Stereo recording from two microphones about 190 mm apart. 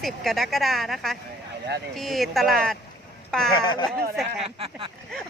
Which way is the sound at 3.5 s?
25° left (ahead or behind).